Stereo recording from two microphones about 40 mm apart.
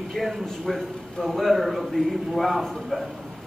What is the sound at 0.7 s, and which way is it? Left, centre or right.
A man's voice, centre.